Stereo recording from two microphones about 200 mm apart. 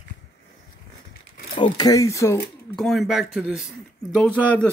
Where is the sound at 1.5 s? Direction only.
20° left (ahead or behind).